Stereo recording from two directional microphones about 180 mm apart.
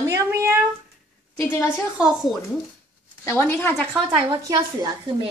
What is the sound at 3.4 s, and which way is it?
Speech, 10° left (ahead or behind).